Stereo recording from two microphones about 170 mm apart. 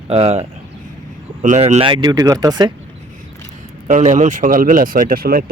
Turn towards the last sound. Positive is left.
turn(degrees=-60)  # may be behind; listen again after turning